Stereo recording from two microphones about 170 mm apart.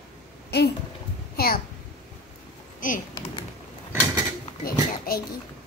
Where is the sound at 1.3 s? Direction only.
60° left (ahead or behind).